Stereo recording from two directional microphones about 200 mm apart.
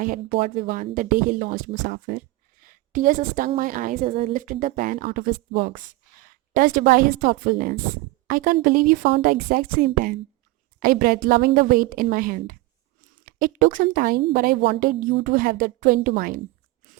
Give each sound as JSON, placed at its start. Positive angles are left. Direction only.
{"t": 0.0, "sound": "a woman's voice", "side_deg": -40}